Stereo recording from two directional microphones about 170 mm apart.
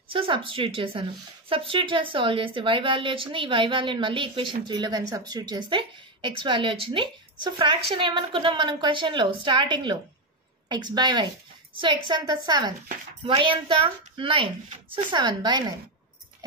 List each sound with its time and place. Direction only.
0.1 s a woman's voice: 30° right (ahead or behind)